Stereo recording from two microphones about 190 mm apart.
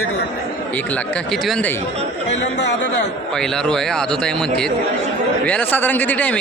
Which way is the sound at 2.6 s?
65° left (ahead or behind).